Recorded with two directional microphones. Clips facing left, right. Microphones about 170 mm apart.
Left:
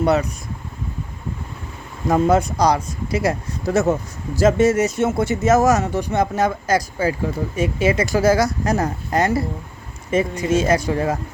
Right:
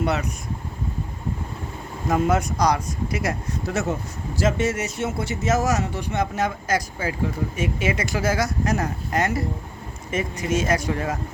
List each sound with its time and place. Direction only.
0.0 s speech: 35° left (ahead or behind)
2.0 s speech: 35° left (ahead or behind)